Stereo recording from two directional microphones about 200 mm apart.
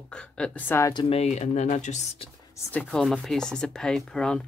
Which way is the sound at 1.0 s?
30° left (ahead or behind).